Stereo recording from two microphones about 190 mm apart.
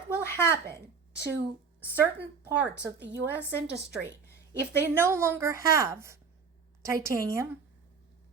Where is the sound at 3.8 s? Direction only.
15° left (ahead or behind).